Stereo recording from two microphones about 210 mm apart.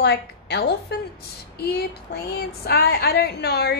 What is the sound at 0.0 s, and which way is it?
A woman's voice, 50° left (ahead or behind).